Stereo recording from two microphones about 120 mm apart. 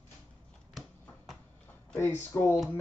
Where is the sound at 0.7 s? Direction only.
Centre (ahead or behind).